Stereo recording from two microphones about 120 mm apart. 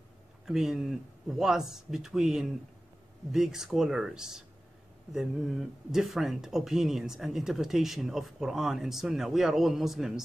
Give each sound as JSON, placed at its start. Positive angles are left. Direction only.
{"t": 0.5, "sound": "speech", "side_deg": -5}